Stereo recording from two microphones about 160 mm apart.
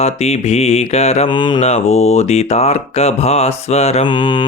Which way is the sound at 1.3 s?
30° left (ahead or behind).